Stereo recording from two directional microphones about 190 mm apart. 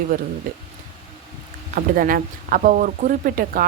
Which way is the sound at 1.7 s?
50° right (ahead or behind).